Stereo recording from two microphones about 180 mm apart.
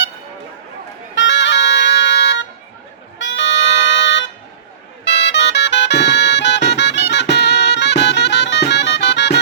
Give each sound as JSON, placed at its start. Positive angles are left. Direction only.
{"t": 1.1, "sound": "music", "side_deg": 85}
{"t": 3.2, "sound": "a sound", "side_deg": 90}
{"t": 5.0, "sound": "music", "side_deg": 80}